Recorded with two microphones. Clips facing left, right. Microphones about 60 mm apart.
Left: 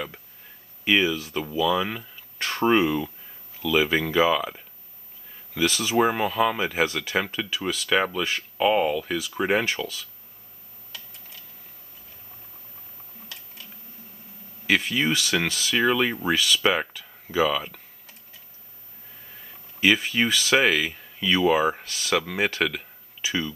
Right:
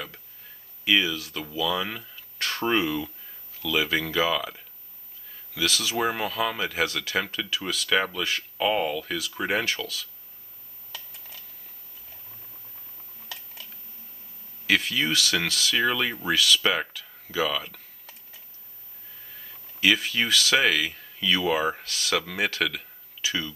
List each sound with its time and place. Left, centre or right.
0.8 s speech: centre
14.7 s speech: centre
19.3 s speech: centre